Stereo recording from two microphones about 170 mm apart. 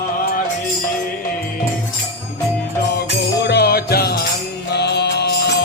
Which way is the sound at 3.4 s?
70° left (ahead or behind).